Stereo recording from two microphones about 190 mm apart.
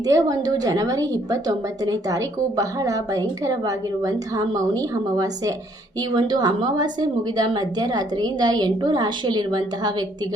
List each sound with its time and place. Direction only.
0.0 s a woman's voice: 20° right (ahead or behind)